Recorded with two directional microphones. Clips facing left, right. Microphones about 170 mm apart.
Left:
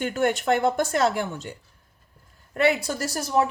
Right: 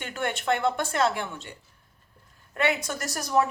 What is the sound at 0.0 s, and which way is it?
A woman's voice, 40° left (ahead or behind).